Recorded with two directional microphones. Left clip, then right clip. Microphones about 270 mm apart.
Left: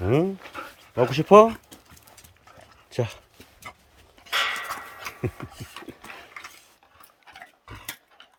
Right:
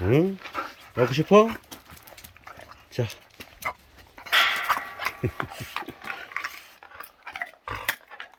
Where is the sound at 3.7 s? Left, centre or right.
Centre.